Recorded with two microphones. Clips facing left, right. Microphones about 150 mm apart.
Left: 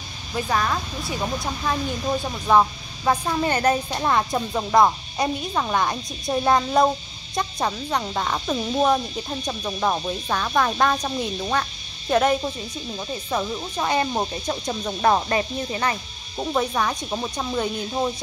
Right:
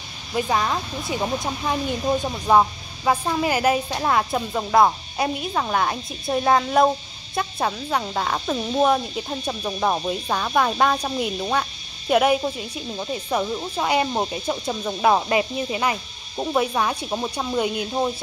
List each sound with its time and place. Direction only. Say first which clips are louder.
0.4 s speech: right 1 dB; 15° right (ahead or behind)